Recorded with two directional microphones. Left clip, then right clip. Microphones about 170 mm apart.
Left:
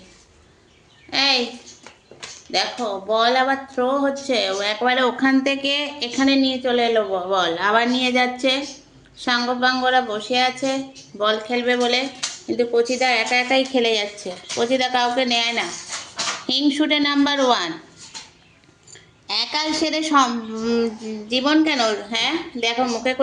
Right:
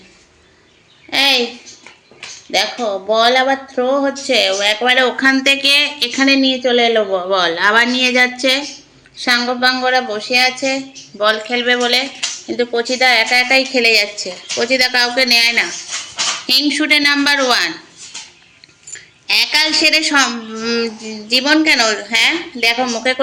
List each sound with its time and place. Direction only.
1.1 s a sound: 35° right (ahead or behind)
2.5 s speech: 35° right (ahead or behind)
4.3 s speech: 10° right (ahead or behind)
5.1 s a woman's voice: 20° left (ahead or behind)
6.1 s a woman's voice: 20° right (ahead or behind)
6.6 s speech: 35° right (ahead or behind); by 8.6 s 10° right (ahead or behind)
9.1 s a woman's voice: 20° right (ahead or behind); by 15.6 s 5° left (ahead or behind)
16.5 s a woman's voice: 20° left (ahead or behind)
18.9 s a sound: 15° left (ahead or behind)
19.5 s a woman's voice: 20° left (ahead or behind); by 23.2 s centre (ahead or behind)